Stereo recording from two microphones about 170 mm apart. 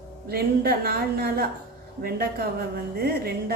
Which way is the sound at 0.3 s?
65° right (ahead or behind).